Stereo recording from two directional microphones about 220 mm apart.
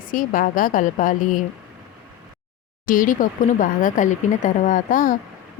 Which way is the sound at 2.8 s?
35° left (ahead or behind).